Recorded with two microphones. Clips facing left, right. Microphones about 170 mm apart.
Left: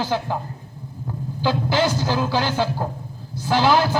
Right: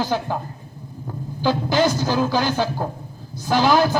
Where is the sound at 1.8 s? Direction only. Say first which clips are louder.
Right 2 dB; 15° right (ahead or behind).